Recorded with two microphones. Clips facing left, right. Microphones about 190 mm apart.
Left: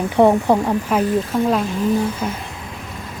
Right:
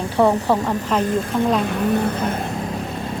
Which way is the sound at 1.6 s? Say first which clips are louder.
Left 1 dB; 65° right (ahead or behind).